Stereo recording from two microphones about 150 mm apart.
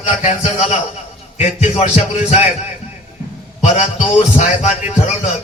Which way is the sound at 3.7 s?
50° left (ahead or behind).